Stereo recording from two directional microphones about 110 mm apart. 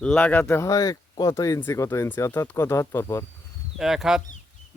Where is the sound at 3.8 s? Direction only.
5° right (ahead or behind).